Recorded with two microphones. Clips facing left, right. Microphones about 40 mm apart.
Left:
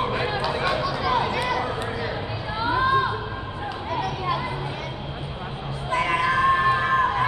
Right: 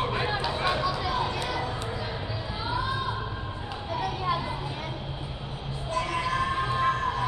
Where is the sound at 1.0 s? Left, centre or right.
Left.